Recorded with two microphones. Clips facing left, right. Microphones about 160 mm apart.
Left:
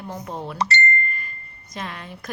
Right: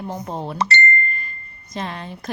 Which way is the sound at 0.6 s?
65° right (ahead or behind).